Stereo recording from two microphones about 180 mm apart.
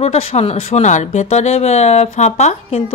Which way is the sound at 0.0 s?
35° left (ahead or behind).